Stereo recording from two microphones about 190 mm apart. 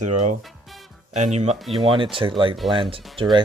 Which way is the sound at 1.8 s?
25° right (ahead or behind).